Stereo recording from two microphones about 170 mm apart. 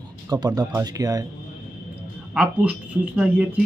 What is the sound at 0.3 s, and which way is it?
Speech, 20° right (ahead or behind).